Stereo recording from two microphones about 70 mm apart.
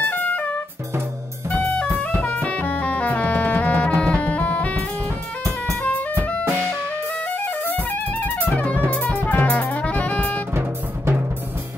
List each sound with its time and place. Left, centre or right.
0.0 s music: left
7.4 s music: left